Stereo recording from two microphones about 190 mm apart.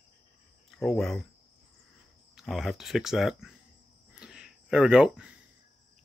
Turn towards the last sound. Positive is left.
turn(degrees=-5)  # may be behind; listen again after turning